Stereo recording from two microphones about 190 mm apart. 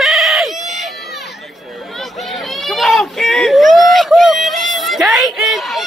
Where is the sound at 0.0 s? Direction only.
Centre (ahead or behind).